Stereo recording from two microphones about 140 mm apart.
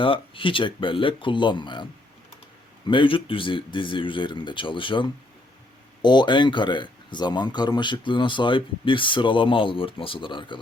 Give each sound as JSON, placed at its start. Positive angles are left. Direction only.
{"t": 0.0, "sound": "speech", "side_deg": 40}